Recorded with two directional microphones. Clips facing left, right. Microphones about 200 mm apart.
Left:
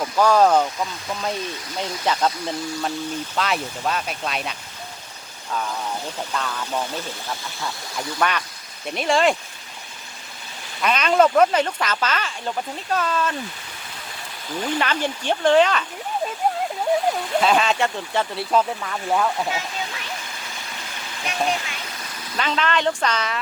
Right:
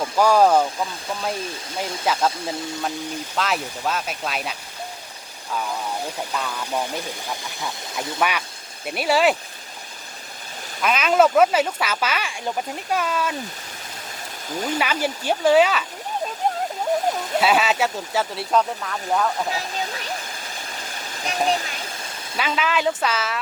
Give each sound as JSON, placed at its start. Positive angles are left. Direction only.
{"t": 0.0, "sound": "speech", "side_deg": -10}
{"t": 6.1, "sound": "speech", "side_deg": -10}
{"t": 10.8, "sound": "speech", "side_deg": -5}
{"t": 14.8, "sound": "speech", "side_deg": -10}
{"t": 17.3, "sound": "speech", "side_deg": -5}
{"t": 19.5, "sound": "a sound", "side_deg": -35}
{"t": 20.9, "sound": "vehicle", "side_deg": -40}
{"t": 21.5, "sound": "speech", "side_deg": -35}
{"t": 22.4, "sound": "speech", "side_deg": -5}